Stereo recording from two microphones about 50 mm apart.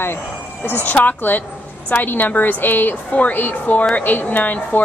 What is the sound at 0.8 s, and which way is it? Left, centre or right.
Speech, left.